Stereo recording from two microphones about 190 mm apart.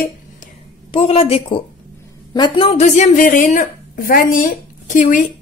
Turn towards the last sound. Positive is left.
turn(degrees=40)  # may be behind; listen again after turning